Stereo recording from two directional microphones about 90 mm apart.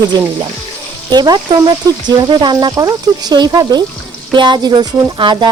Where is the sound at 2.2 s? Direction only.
55° right (ahead or behind).